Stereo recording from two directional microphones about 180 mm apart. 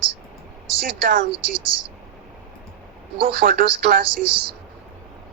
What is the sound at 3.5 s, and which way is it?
Speech, 50° right (ahead or behind).